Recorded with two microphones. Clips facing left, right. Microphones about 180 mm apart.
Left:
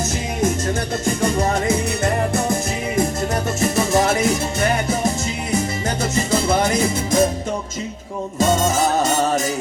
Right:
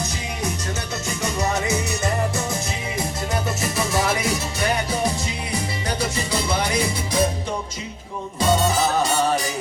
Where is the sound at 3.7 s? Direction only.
50° left (ahead or behind).